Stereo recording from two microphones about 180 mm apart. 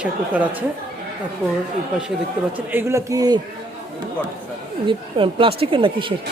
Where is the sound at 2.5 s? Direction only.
10° right (ahead or behind).